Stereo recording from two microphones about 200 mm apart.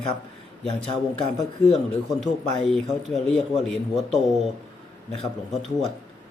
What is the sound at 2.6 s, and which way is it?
Speech, centre (ahead or behind).